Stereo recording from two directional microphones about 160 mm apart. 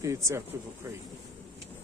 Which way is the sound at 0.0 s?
20° right (ahead or behind).